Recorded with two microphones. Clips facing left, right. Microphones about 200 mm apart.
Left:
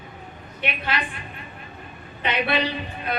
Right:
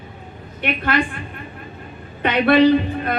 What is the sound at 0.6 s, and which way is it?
Speech, 55° right (ahead or behind).